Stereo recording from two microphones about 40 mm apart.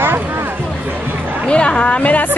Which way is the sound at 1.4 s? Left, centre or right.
Left.